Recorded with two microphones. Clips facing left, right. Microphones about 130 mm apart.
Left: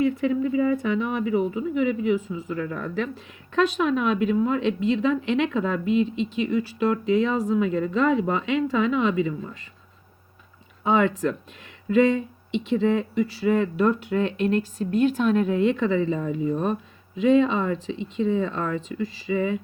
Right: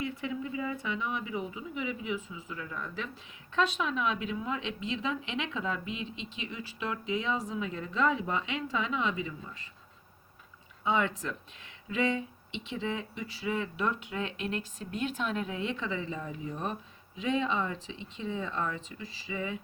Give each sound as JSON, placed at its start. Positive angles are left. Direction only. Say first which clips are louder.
{"t": 0.0, "sound": "speech", "louder": "left 13 dB", "side_deg": 55}
{"t": 10.8, "sound": "speech", "louder": "left 8 dB", "side_deg": 60}
{"t": 12.7, "sound": "speech", "louder": "left 13 dB", "side_deg": 50}
{"t": 16.1, "sound": "speech", "louder": "left 12 dB", "side_deg": 90}
{"t": 17.2, "sound": "speech", "louder": "left 11 dB", "side_deg": 60}